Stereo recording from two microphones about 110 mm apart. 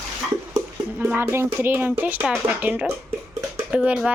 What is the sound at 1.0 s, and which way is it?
Speech, 15° right (ahead or behind).